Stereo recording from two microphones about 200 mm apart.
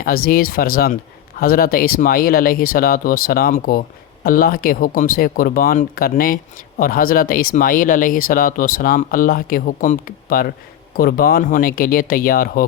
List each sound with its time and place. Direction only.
0.0 s speech: 50° left (ahead or behind)